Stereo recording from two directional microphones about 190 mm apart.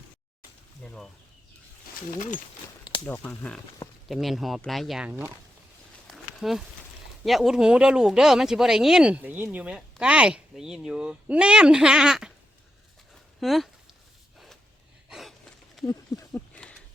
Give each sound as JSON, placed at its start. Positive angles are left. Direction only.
{"t": 0.8, "sound": "speech", "side_deg": 5}
{"t": 2.1, "sound": "speech", "side_deg": 45}
{"t": 3.1, "sound": "speech", "side_deg": 10}
{"t": 6.1, "sound": "a sound", "side_deg": 0}
{"t": 7.3, "sound": "speech", "side_deg": 0}
{"t": 13.4, "sound": "speech", "side_deg": 0}
{"t": 14.3, "sound": "a sound", "side_deg": 0}
{"t": 15.1, "sound": "gasp", "side_deg": 0}
{"t": 15.9, "sound": "speech", "side_deg": 20}